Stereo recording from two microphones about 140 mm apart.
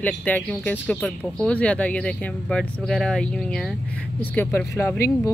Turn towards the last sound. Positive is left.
turn(degrees=20)  # may be behind; listen again after turning